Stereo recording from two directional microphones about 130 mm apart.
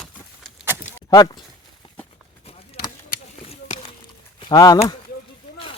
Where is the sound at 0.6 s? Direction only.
15° right (ahead or behind).